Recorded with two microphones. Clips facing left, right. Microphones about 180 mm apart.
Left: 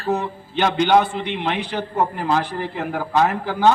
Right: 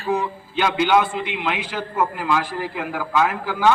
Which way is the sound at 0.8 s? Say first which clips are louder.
Left 2 dB; 40° left (ahead or behind).